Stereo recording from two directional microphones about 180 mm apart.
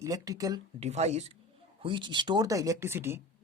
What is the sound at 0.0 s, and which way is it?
Speech, 20° right (ahead or behind).